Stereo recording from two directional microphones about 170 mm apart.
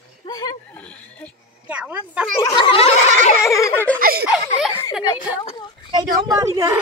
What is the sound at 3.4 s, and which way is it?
Giggle, 15° left (ahead or behind).